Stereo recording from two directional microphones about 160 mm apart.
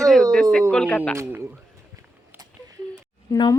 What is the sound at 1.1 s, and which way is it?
Speech, 15° right (ahead or behind).